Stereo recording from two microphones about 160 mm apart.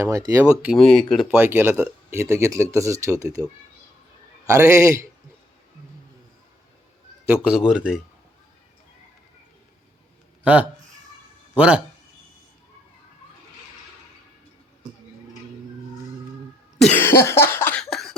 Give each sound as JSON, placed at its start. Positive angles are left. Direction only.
{"t": 0.0, "sound": "speech", "side_deg": -20}
{"t": 0.6, "sound": "speech", "side_deg": 0}
{"t": 1.4, "sound": "speech", "side_deg": -15}
{"t": 7.3, "sound": "speech", "side_deg": -5}
{"t": 10.4, "sound": "speech", "side_deg": -10}
{"t": 16.8, "sound": "cough", "side_deg": 10}